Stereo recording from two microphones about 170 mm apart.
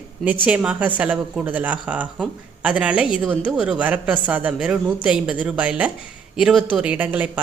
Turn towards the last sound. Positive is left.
turn(degrees=-10)  # may be behind; listen again after turning